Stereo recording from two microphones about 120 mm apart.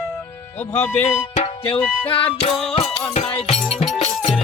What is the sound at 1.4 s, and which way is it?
Music, 50° left (ahead or behind).